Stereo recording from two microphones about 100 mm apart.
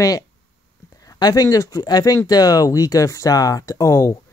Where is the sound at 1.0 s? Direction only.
40° left (ahead or behind).